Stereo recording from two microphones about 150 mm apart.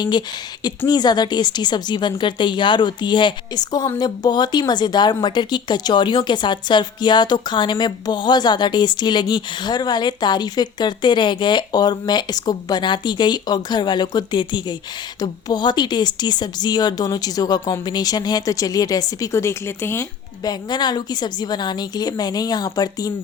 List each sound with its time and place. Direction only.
0.0 s speech: 30° left (ahead or behind)
20.4 s speech: 30° left (ahead or behind)